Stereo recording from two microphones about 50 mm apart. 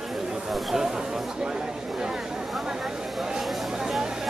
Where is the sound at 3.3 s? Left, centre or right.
Centre.